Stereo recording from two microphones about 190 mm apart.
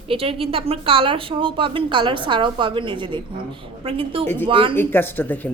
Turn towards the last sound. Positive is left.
turn(degrees=10)  # may be behind; listen again after turning